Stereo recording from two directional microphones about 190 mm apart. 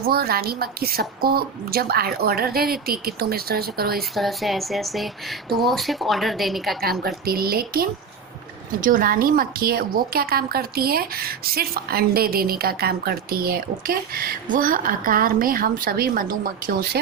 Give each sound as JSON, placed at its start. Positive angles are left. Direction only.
{"t": 0.1, "sound": "a woman's voice", "side_deg": -55}
{"t": 4.1, "sound": "a woman's voice", "side_deg": 0}
{"t": 7.0, "sound": "a woman's voice", "side_deg": -50}